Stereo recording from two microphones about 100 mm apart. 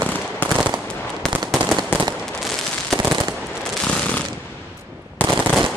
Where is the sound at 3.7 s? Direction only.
10° left (ahead or behind).